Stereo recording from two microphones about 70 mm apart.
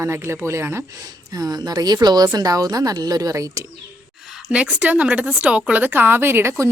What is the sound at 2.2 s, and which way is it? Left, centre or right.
Speech, right.